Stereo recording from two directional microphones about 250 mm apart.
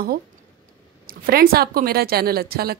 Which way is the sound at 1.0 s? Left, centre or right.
Right.